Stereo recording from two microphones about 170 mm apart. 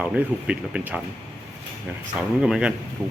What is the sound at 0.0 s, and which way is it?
Speech, 5° right (ahead or behind).